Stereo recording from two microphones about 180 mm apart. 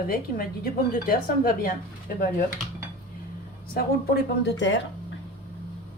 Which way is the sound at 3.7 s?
65° left (ahead or behind).